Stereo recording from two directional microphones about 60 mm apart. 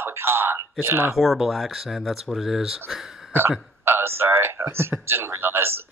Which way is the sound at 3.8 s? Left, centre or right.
Right.